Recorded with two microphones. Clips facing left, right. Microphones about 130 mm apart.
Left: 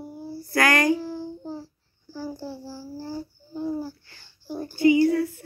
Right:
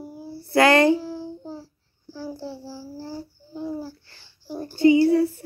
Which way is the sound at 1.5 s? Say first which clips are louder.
Left 2 dB; 5° right (ahead or behind).